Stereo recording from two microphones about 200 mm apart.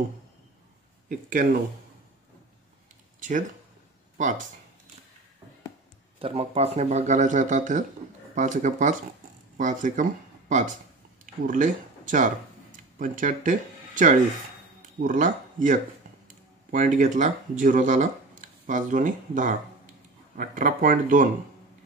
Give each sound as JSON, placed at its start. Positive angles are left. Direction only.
{"t": 1.0, "sound": "speech", "side_deg": -45}
{"t": 3.2, "sound": "a sound", "side_deg": -40}
{"t": 4.2, "sound": "speech", "side_deg": -40}
{"t": 6.1, "sound": "speech", "side_deg": -30}
{"t": 11.4, "sound": "speech", "side_deg": -40}